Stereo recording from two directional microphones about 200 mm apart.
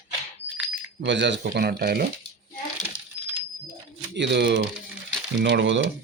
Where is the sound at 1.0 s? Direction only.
60° right (ahead or behind).